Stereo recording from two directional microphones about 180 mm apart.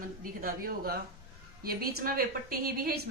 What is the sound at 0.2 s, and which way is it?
A woman's voice, 50° right (ahead or behind).